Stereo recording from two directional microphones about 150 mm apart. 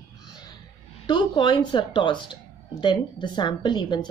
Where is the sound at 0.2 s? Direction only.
25° left (ahead or behind).